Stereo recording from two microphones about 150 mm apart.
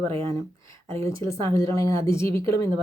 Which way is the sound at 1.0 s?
20° left (ahead or behind).